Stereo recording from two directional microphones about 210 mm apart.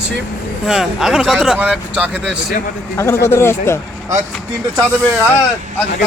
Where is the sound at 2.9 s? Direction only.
10° left (ahead or behind).